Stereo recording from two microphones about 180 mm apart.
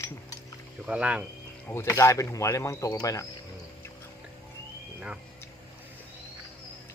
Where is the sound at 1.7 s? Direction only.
15° left (ahead or behind).